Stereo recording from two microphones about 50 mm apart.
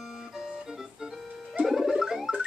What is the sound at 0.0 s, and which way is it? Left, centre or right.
Music, centre.